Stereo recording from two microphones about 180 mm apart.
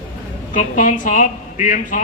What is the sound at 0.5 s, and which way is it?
Speech, 45° left (ahead or behind).